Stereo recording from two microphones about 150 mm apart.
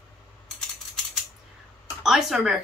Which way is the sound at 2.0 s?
5° right (ahead or behind).